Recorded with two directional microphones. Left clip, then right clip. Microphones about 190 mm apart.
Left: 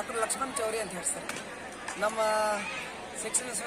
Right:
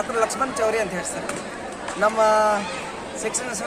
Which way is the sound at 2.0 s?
5° right (ahead or behind).